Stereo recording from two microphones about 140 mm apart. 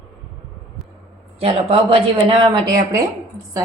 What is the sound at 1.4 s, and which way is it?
A woman's voice, 40° right (ahead or behind).